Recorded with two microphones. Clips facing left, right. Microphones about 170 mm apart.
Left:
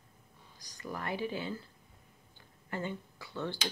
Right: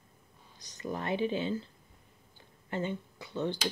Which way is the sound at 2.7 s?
20° right (ahead or behind).